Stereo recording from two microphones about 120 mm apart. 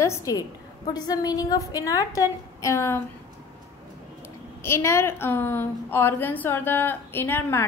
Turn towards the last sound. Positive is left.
turn(degrees=15)  # may be behind; listen again after turning